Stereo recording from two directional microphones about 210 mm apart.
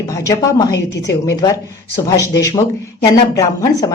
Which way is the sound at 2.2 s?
15° left (ahead or behind).